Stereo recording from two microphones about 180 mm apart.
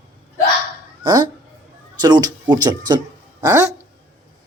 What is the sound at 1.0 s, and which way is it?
Speech, 25° right (ahead or behind).